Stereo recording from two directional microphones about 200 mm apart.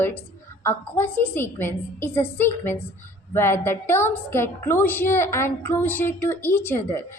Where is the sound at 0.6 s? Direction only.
10° left (ahead or behind).